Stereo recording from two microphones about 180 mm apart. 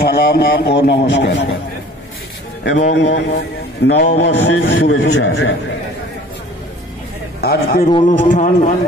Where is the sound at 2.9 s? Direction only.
80° left.